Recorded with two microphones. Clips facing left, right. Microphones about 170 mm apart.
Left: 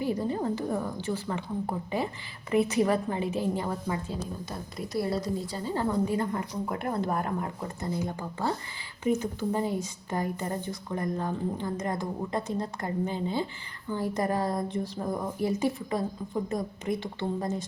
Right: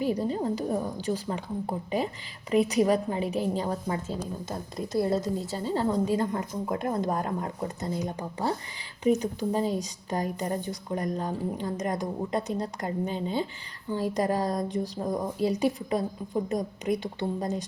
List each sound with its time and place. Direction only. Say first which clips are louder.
0.0 s a woman's voice: right 1 dB; 15° right (ahead or behind)
2.5 s a woman's voice: right 2 dB; 15° right (ahead or behind)